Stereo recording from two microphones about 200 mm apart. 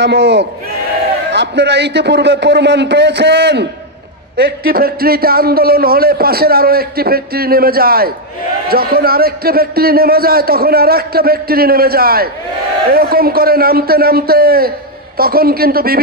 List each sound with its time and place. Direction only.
0.0 s a man's voice: 55° right (ahead or behind)